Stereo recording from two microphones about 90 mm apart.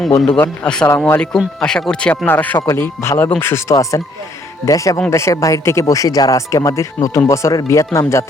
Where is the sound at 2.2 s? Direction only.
20° left (ahead or behind).